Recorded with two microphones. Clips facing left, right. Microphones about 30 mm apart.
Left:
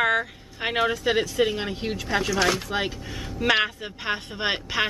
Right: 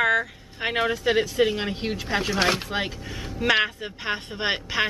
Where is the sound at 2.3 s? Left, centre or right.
Right.